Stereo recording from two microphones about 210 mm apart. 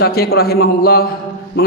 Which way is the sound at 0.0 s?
50° left (ahead or behind).